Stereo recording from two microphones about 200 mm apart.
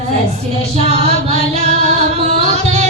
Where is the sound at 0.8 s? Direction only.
30° right (ahead or behind).